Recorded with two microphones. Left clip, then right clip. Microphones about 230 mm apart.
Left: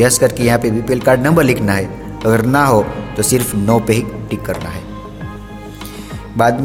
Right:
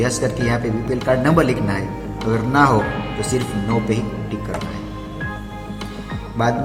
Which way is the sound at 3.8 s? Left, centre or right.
Left.